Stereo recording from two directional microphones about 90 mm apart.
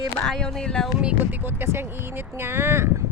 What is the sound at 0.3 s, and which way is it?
Speech, 5° left (ahead or behind).